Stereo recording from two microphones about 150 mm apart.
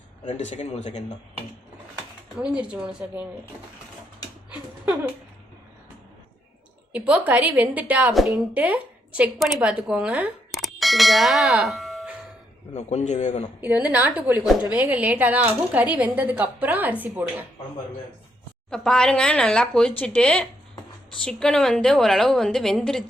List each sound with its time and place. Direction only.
0.3 s a man's voice: 50° left (ahead or behind)
2.4 s a woman's voice: 5° right (ahead or behind)
6.9 s a woman's voice: 10° right (ahead or behind)
10.5 s doorbell: centre (ahead or behind)
12.7 s a man's voice: 50° left (ahead or behind)
13.6 s a woman's voice: 10° right (ahead or behind)
14.4 s a woman's voice: centre (ahead or behind)
14.7 s a woman's voice: 10° right (ahead or behind)
18.7 s a woman's voice: 5° left (ahead or behind)